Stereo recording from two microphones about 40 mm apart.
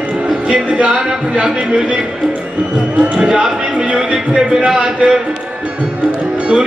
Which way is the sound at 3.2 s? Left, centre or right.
Centre.